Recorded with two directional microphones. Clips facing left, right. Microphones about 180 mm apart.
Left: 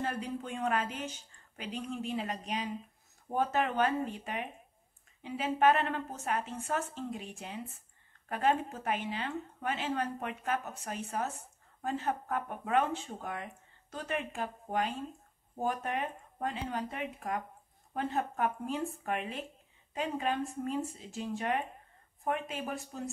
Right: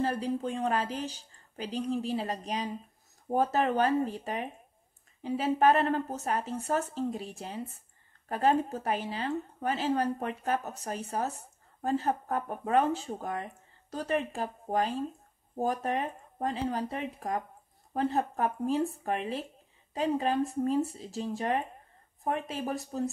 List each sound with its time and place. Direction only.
0.0 s speech: 35° right (ahead or behind)